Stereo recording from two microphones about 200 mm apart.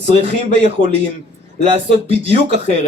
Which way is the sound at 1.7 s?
30° right (ahead or behind).